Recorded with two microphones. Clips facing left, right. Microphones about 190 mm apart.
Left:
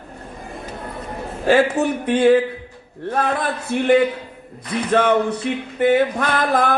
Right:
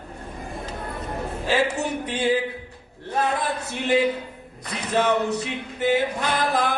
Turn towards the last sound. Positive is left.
turn(degrees=50)  # may be behind; listen again after turning